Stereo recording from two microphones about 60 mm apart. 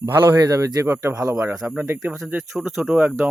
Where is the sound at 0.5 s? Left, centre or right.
Right.